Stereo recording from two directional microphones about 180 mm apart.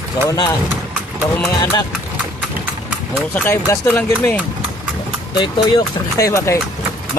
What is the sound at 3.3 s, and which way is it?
Speech, 15° left (ahead or behind).